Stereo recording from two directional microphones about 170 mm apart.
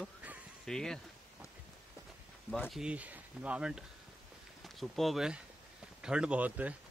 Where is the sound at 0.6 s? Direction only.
5° left (ahead or behind).